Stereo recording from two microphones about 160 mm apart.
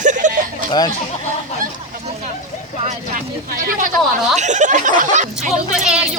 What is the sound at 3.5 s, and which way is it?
Speech, 60° right (ahead or behind).